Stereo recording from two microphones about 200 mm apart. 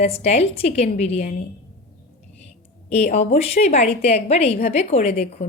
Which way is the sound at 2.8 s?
35° left (ahead or behind).